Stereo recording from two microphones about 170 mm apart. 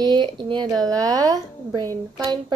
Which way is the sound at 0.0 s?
25° right (ahead or behind).